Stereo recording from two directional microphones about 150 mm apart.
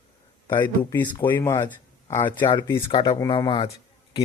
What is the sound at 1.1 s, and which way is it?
Speech, 15° left (ahead or behind).